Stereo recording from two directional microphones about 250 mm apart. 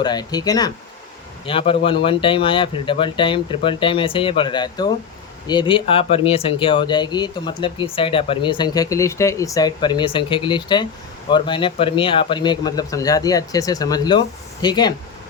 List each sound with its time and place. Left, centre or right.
0.0 s a man's voice: centre